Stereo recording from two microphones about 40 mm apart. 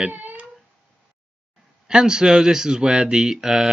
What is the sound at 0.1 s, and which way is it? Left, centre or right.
Cat, right.